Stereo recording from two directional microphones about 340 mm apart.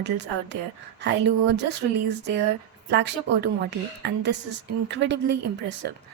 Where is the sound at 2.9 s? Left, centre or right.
Right.